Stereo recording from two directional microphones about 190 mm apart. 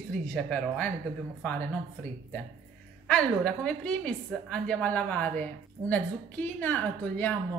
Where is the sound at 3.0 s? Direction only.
5° left (ahead or behind).